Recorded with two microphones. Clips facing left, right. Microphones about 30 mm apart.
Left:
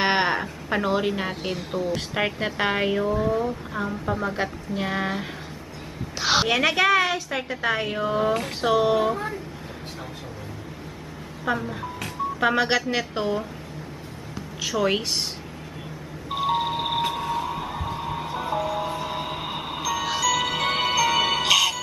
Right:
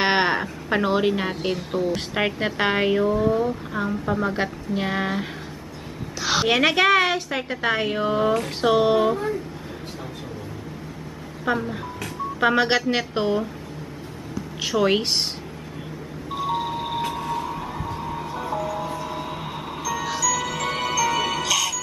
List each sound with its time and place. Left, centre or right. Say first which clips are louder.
0.0 s a sound: right 2 dB; centre
1.4 s a woman's voice: right 3 dB; centre
6.1 s a sound: even; centre
6.5 s a woman's voice: right 4 dB; centre
11.4 s a woman's voice: right 2 dB; centre
14.6 s a woman's voice: right 3 dB; centre
16.3 s music: left 2 dB; left
17.0 s a sound: left 1 dB; centre
17.9 s music: even; left